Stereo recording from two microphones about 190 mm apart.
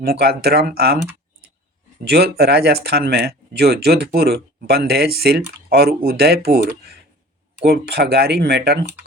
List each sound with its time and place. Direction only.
0.0 s speech: 55° right (ahead or behind)
2.0 s speech: 55° right (ahead or behind)